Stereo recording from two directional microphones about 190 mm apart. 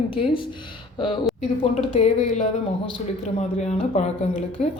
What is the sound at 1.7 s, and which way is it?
Speech, 35° left (ahead or behind).